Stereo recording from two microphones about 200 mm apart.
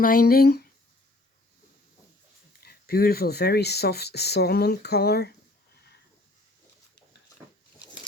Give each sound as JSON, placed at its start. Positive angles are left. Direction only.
{"t": 0.0, "sound": "speech", "side_deg": 45}
{"t": 2.6, "sound": "speech", "side_deg": 50}